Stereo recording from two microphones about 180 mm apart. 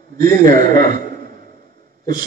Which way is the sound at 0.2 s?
50° right (ahead or behind).